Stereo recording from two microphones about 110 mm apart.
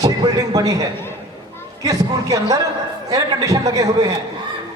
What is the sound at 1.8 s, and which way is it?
A man's voice, 30° right (ahead or behind).